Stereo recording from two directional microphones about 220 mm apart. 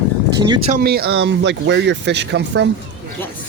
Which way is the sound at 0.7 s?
45° right (ahead or behind).